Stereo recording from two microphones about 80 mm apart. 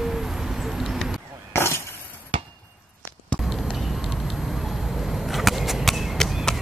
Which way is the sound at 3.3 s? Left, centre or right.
Centre.